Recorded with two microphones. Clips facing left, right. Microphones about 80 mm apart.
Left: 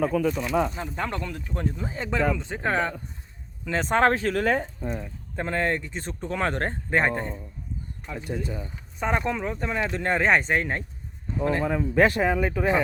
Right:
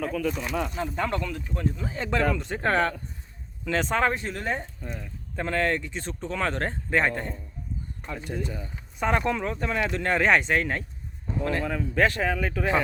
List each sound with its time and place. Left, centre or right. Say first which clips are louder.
0.0 s speech: left 4 dB; centre
2.0 s speech: even; centre
3.8 s speech: left 4 dB; left
4.8 s speech: left 6 dB; left
5.9 s speech: left 1 dB; left
7.1 s speech: left 2 dB; centre
8.4 s speech: left 1 dB; centre